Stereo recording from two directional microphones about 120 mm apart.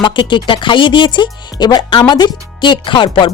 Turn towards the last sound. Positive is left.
turn(degrees=45)  # may be behind; listen again after turning